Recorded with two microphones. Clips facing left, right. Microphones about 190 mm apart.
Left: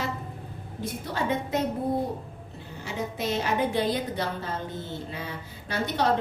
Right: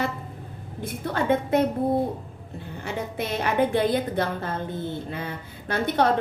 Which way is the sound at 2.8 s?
55° right (ahead or behind).